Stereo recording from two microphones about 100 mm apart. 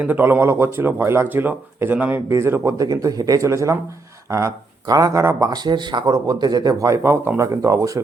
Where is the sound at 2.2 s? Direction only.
30° right (ahead or behind).